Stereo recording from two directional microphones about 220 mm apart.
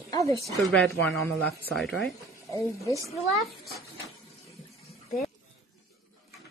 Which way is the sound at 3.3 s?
Centre (ahead or behind).